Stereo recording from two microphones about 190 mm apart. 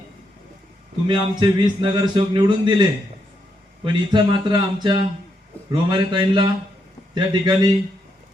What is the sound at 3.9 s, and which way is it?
Speech, 25° right (ahead or behind).